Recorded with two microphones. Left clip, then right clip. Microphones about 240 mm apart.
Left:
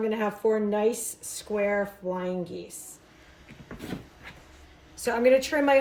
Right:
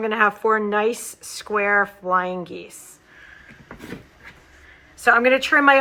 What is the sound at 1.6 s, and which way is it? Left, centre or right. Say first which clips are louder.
Speech: right 8 dB; right.